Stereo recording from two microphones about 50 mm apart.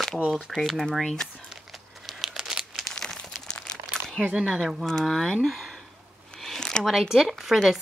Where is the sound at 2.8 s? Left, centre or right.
Centre.